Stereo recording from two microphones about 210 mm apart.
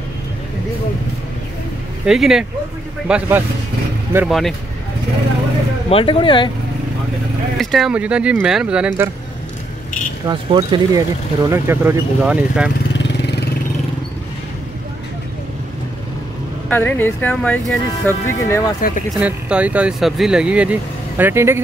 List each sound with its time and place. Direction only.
2.0 s speech: centre (ahead or behind)
5.9 s speech: 25° left (ahead or behind)
7.5 s speech: centre (ahead or behind)
10.2 s speech: 20° right (ahead or behind); by 12.7 s 5° right (ahead or behind)
16.6 s speech: 10° left (ahead or behind)
18.8 s speech: 45° left (ahead or behind)
19.1 s speech: 5° right (ahead or behind)